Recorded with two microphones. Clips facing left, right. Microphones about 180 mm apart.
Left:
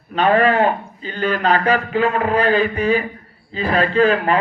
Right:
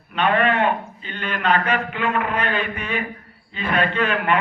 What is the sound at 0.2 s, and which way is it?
A man's voice, 35° left (ahead or behind).